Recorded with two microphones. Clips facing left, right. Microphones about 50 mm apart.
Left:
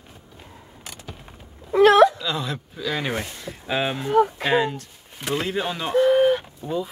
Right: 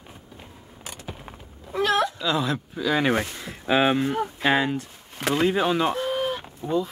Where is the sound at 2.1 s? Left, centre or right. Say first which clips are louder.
Right 3 dB; centre.